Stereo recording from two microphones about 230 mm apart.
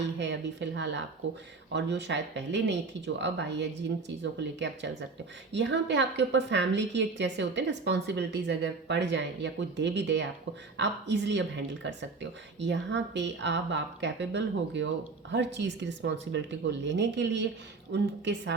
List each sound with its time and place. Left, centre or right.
0.0 s a woman's voice: right